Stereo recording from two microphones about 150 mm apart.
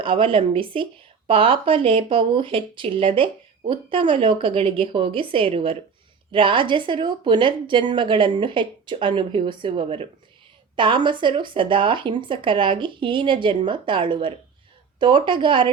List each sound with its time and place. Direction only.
0.0 s speech: 35° right (ahead or behind)